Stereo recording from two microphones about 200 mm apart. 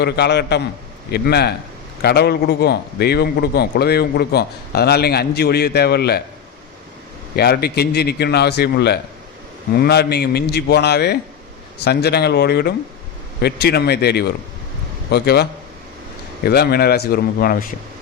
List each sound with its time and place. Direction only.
0.0 s a man's voice: 55° left (ahead or behind)
7.3 s a man's voice: 50° left (ahead or behind)